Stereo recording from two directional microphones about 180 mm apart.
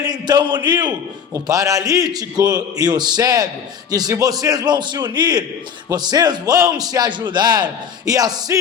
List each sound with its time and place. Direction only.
0.0 s a man's voice: 20° right (ahead or behind)